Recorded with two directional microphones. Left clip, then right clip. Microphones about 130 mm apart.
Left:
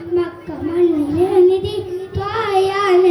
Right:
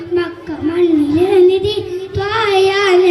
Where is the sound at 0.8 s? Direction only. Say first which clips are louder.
Right 2 dB; 40° left (ahead or behind).